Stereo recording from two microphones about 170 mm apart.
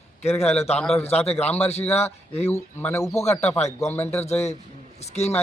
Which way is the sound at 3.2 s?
40° left (ahead or behind).